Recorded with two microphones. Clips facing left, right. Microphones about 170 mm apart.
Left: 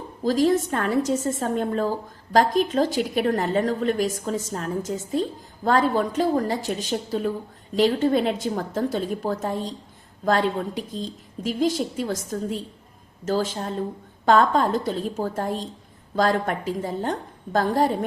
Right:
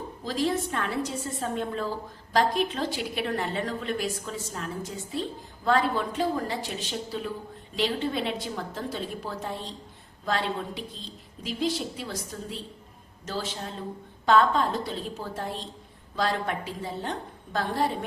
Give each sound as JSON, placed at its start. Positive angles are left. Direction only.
{"t": 0.3, "sound": "a woman's voice", "side_deg": 45}